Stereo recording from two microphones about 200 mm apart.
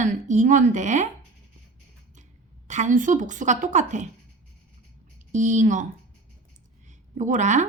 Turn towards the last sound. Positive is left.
turn(degrees=-35)  # may be behind; listen again after turning